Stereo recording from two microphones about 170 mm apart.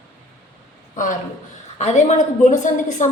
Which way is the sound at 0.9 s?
50° left (ahead or behind).